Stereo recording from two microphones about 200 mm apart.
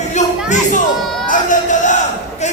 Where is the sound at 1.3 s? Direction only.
40° left (ahead or behind).